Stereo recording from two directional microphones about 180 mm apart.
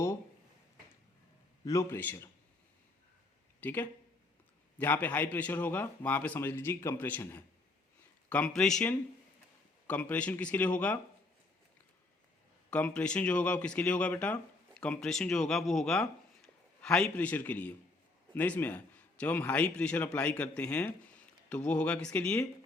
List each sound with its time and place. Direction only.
1.6 s a man's voice: 15° left (ahead or behind)
3.6 s a man's voice: 10° left (ahead or behind)
12.7 s a man's voice: 5° left (ahead or behind)